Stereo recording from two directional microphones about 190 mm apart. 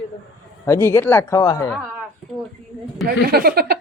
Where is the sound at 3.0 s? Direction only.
55° right (ahead or behind).